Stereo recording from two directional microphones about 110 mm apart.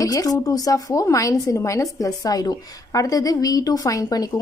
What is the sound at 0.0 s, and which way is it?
Speech, 35° left (ahead or behind).